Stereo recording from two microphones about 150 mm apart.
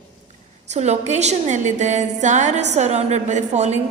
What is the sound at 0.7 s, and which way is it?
A woman's voice, 50° right (ahead or behind).